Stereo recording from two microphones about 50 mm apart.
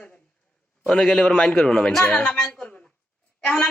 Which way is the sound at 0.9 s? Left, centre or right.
Centre.